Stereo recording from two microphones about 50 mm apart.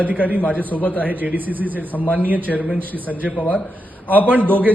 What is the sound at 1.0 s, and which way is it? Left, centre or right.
Speech, right.